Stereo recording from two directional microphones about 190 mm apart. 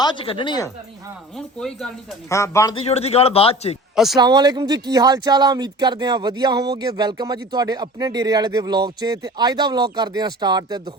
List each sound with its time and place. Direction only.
0.0 s speech: 25° left (ahead or behind)
1.4 s speech: 5° left (ahead or behind)
2.3 s a man's voice: 15° left (ahead or behind)
2.7 s a man's voice: 35° left (ahead or behind)
3.9 s speech: centre (ahead or behind)
4.2 s speech: 20° right (ahead or behind)